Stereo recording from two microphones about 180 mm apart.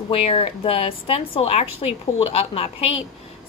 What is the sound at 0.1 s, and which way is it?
A woman's voice, 30° left (ahead or behind).